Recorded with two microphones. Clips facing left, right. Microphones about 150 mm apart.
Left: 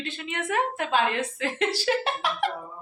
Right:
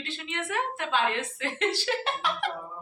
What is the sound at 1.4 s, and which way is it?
A woman's voice, 10° left (ahead or behind).